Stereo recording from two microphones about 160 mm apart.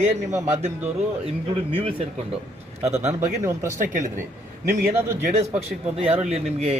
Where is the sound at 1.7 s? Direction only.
35° right (ahead or behind).